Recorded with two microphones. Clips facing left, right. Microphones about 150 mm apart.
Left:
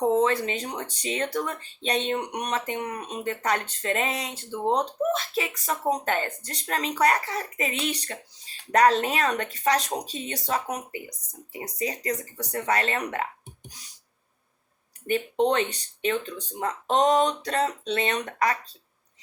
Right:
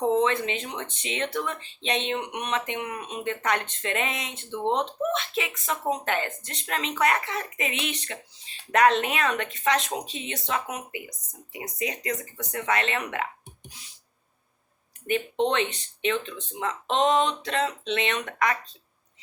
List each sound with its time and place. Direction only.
0.2 s speech: 35° left (ahead or behind)
15.4 s speech: 40° left (ahead or behind)